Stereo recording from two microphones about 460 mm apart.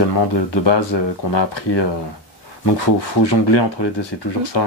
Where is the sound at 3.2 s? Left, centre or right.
Left.